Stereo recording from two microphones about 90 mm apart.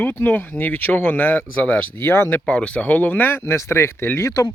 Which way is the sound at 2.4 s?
10° left (ahead or behind).